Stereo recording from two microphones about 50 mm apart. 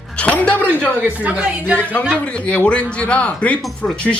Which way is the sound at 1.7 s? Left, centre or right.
Left.